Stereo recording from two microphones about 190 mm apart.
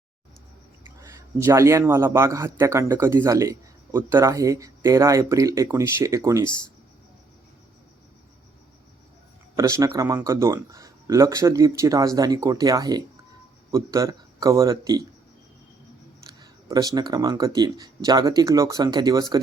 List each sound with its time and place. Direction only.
1.0 s speech: 15° right (ahead or behind)
9.6 s a man's voice: 15° right (ahead or behind)
16.4 s speech: 20° right (ahead or behind)